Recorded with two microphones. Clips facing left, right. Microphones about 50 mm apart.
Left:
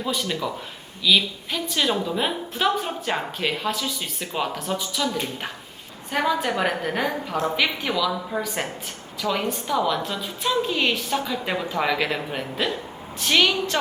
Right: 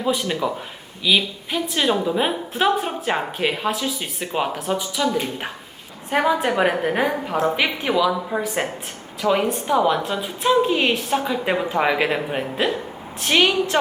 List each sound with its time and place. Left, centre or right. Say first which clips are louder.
0.0 s a woman's voice: right 4 dB; centre
3.7 s a woman's voice: right 3 dB; centre